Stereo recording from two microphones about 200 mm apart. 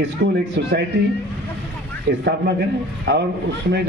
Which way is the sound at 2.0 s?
55° right (ahead or behind).